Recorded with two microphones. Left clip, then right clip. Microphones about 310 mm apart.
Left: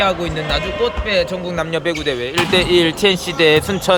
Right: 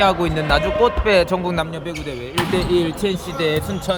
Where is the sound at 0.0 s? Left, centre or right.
Centre.